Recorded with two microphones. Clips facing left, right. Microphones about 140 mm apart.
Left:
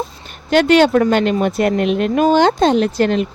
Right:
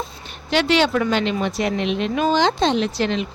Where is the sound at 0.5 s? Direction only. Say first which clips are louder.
Left 7 dB; 50° left (ahead or behind).